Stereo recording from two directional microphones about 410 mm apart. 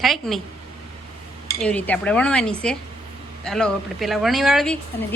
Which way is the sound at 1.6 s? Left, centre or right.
Centre.